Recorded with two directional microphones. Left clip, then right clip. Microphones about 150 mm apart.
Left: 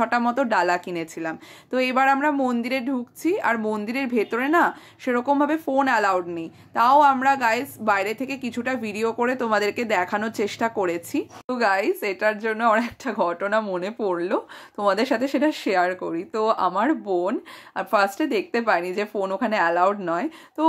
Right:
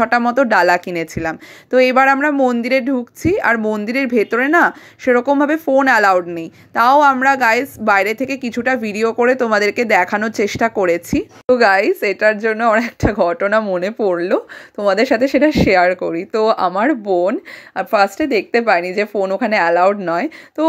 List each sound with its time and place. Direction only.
0.0 s speech: 30° right (ahead or behind)